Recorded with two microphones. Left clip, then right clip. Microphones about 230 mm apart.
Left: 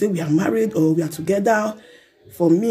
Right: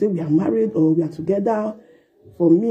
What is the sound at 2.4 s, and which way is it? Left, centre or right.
Speech, left.